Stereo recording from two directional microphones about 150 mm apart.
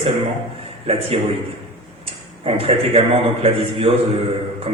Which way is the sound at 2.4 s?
40° right (ahead or behind).